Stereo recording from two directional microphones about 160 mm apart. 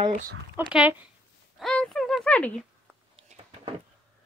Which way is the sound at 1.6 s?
5° left (ahead or behind).